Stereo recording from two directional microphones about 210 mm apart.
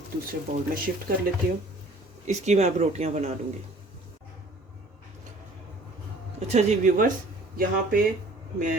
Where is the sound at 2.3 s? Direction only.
30° right (ahead or behind).